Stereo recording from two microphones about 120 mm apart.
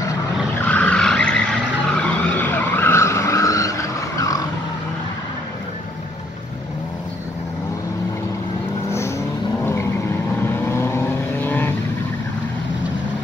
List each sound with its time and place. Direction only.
0.7 s vehicle: 10° left (ahead or behind); by 4.5 s 30° left (ahead or behind)
10.4 s vehicle: 20° left (ahead or behind)